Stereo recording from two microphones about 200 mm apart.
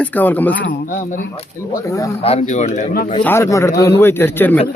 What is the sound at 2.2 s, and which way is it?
Speech, 30° left (ahead or behind).